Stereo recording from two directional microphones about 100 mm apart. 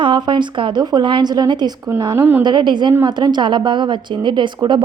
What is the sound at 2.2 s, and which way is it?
Speech, 20° right (ahead or behind).